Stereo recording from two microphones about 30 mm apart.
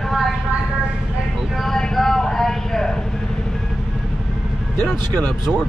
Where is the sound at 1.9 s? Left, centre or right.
Centre.